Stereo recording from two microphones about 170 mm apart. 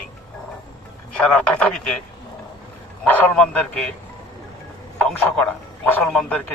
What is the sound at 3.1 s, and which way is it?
Speech, 10° left (ahead or behind).